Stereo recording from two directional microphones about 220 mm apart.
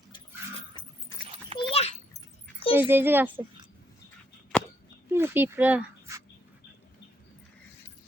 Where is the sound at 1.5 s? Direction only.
25° left (ahead or behind).